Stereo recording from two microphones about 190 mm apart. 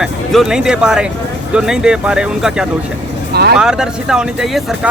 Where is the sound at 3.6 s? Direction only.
5° right (ahead or behind).